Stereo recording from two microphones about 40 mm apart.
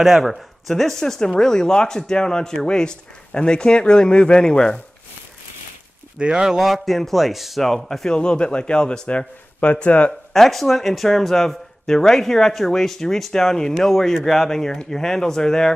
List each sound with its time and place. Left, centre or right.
0.2 s a man's voice: centre
6.1 s speech: right
6.4 s a man's voice: centre
8.1 s a man's voice: left
10.3 s speech: centre